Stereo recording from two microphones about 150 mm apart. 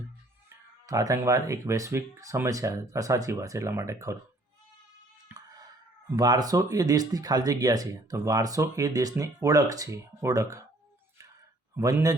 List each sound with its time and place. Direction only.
0.9 s speech: 20° right (ahead or behind)
5.3 s a sound: 25° right (ahead or behind)
6.1 s speech: 25° right (ahead or behind)
11.8 s speech: 20° right (ahead or behind)